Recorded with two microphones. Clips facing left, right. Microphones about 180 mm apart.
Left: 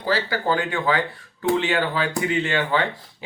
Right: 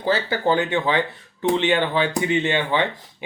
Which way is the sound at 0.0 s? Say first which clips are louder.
Right 2 dB; 25° right (ahead or behind).